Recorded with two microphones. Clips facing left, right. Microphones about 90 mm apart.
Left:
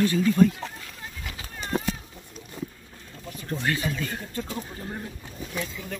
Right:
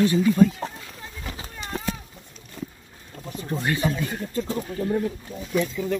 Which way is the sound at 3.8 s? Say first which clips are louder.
Right 4 dB; 30° right (ahead or behind).